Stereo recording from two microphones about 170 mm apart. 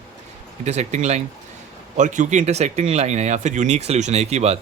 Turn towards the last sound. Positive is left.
turn(degrees=-40)  # may be behind; listen again after turning